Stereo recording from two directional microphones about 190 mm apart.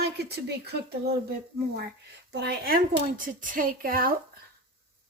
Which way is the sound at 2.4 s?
55° right (ahead or behind).